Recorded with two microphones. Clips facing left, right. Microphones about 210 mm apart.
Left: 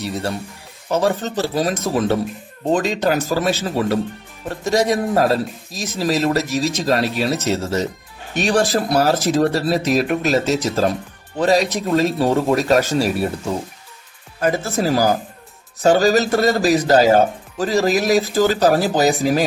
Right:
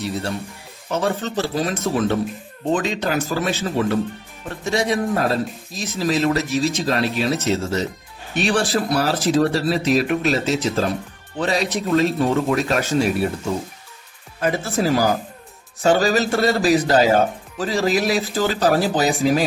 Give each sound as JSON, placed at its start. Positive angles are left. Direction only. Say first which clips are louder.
{"t": 0.9, "sound": "speech", "louder": "left 3 dB", "side_deg": 40}
{"t": 14.4, "sound": "speech", "louder": "left 1 dB", "side_deg": 40}